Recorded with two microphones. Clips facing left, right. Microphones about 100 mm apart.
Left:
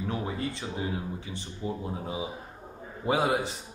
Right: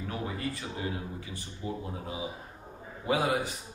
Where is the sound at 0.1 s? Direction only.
25° left (ahead or behind).